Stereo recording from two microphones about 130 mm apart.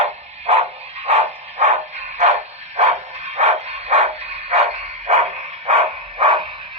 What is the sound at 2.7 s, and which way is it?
Bow-wow, 55° right (ahead or behind).